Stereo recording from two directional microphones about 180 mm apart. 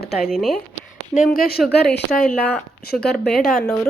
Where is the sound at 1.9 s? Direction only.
65° left (ahead or behind).